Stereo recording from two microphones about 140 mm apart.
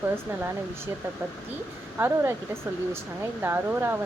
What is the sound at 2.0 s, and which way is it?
Speech, 15° right (ahead or behind).